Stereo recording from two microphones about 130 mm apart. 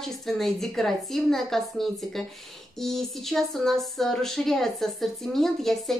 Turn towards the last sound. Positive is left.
turn(degrees=0)  # may be behind; listen again after turning